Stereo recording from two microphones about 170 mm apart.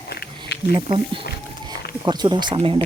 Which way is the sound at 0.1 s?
80° left.